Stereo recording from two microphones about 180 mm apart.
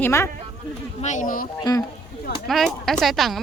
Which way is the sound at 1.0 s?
45° left (ahead or behind).